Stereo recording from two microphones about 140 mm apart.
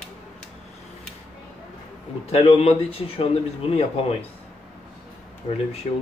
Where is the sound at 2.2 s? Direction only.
45° left (ahead or behind).